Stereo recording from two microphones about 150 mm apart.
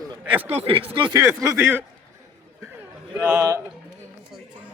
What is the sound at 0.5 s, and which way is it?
Speech, 40° right (ahead or behind).